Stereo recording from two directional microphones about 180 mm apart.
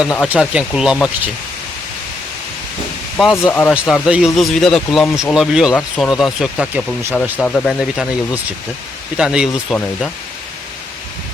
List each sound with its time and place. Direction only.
0.0 s speech: 5° right (ahead or behind)
3.3 s speech: 10° left (ahead or behind)
3.7 s speech: 5° right (ahead or behind)